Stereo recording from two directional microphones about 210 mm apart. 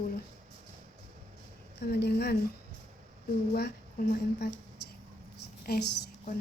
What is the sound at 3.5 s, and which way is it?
Speech, 45° left (ahead or behind).